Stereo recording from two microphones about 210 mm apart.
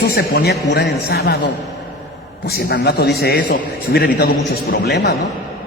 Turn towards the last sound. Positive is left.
turn(degrees=50)  # may be behind; listen again after turning